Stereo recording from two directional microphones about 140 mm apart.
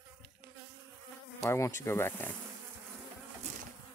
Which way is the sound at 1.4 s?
20° left (ahead or behind).